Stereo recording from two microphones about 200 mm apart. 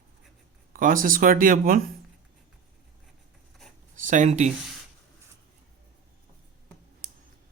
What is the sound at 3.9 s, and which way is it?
Speech, 40° right (ahead or behind).